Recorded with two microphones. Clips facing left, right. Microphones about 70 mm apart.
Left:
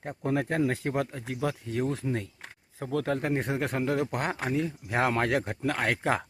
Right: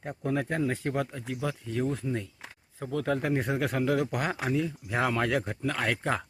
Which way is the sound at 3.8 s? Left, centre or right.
Left.